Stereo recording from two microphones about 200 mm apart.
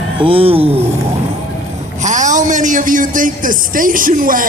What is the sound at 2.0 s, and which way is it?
A man's voice, 40° right (ahead or behind).